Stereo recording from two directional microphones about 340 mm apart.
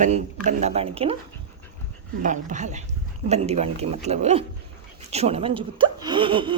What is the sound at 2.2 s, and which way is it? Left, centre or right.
Speech, right.